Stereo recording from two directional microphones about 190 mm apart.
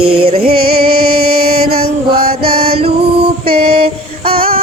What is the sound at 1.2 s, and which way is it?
Mantra, 55° right (ahead or behind).